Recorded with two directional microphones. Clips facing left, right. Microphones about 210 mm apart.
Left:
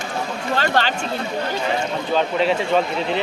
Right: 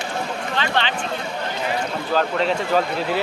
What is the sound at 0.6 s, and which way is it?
Speech, 40° left (ahead or behind).